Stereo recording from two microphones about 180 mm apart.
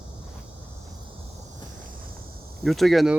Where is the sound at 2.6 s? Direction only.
Centre (ahead or behind).